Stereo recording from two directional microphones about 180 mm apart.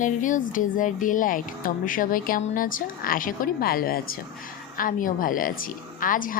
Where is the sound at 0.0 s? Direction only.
45° left (ahead or behind).